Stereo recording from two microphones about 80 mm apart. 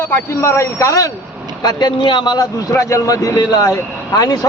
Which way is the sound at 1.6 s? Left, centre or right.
Left.